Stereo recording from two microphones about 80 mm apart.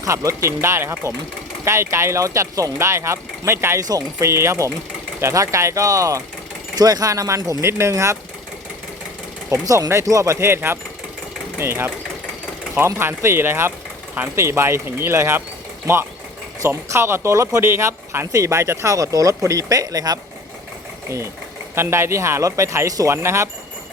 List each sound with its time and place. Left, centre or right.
0.0 s speech: right
3.8 s speech: right
4.3 s speech: right
9.5 s speech: right
16.6 s speech: right
21.8 s speech: right